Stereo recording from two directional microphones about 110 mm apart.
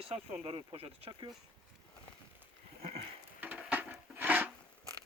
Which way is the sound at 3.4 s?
15° right (ahead or behind).